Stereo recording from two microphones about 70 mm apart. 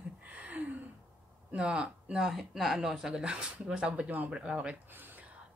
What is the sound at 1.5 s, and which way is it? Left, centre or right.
Speech, centre.